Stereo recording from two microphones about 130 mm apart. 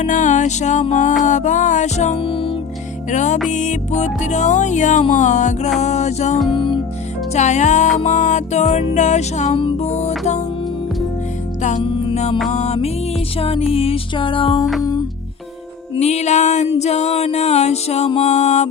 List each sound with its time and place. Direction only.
0.0 s music: 75° left (ahead or behind)
2.1 s music: 45° left (ahead or behind)
3.1 s music: 70° left (ahead or behind)
6.5 s music: 40° left (ahead or behind)
7.3 s music: 65° left (ahead or behind)
9.6 s music: 40° left (ahead or behind)
9.8 s music: 60° left (ahead or behind)
11.8 s music: 40° left (ahead or behind)
12.5 s music: 60° left (ahead or behind); by 14.6 s 40° left (ahead or behind)
16.0 s music: 55° left (ahead or behind)